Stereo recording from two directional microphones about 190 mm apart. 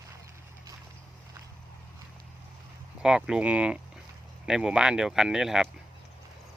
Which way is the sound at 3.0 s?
5° right (ahead or behind).